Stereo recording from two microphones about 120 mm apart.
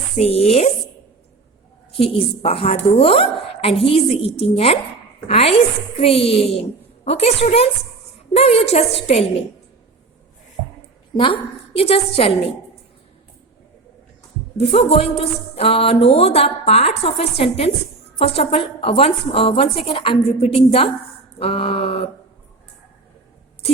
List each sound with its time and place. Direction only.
0.2 s a woman's voice: 55° left (ahead or behind)
2.0 s a woman's voice: 55° left (ahead or behind)
11.8 s speech: 55° left (ahead or behind)
14.6 s speech: 50° left (ahead or behind)